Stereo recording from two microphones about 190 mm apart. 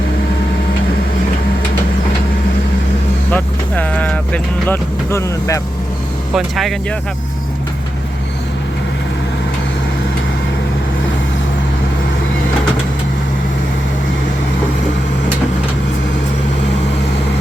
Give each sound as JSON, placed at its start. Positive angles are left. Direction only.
{"t": 3.3, "sound": "vehicle", "side_deg": 10}
{"t": 6.3, "sound": "speech", "side_deg": 0}